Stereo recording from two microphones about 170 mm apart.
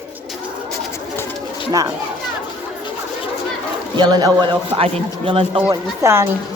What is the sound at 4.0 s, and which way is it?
A man's voice, 25° right (ahead or behind).